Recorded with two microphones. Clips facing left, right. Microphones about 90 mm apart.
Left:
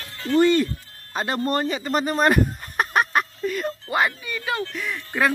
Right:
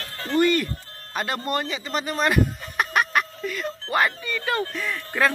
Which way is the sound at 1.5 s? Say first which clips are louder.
Left 4 dB; 40° left (ahead or behind).